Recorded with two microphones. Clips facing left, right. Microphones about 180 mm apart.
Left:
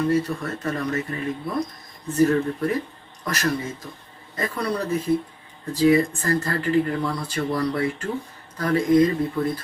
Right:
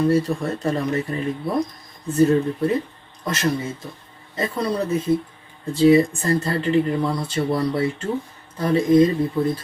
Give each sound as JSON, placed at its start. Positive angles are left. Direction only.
{"t": 0.1, "sound": "speech", "side_deg": -30}